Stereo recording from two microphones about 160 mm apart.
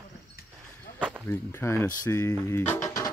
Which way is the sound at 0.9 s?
10° right (ahead or behind).